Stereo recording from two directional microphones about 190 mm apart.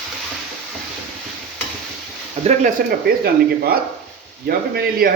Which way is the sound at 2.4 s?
45° right (ahead or behind).